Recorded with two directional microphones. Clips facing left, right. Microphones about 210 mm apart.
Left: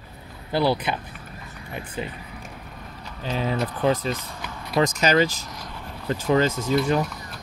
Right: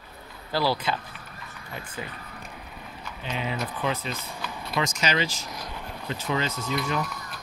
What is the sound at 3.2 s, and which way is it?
Speech, 35° left (ahead or behind).